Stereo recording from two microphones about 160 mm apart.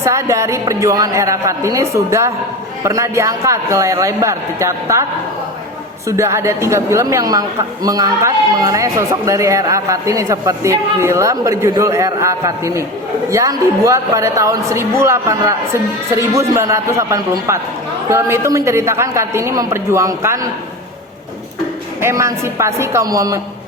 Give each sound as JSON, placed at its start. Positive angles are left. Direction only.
{"t": 0.0, "sound": "a woman's voice", "side_deg": -20}
{"t": 6.1, "sound": "a woman's voice", "side_deg": -15}
{"t": 22.0, "sound": "a woman's voice", "side_deg": -15}